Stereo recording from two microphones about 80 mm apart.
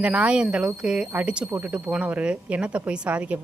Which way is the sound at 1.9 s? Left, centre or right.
Centre.